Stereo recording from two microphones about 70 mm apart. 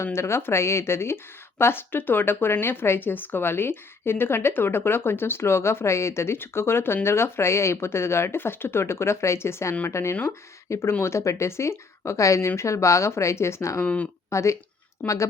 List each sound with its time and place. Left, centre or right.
0.0 s a woman's voice: left
13.8 s speech: left
14.3 s a woman's voice: left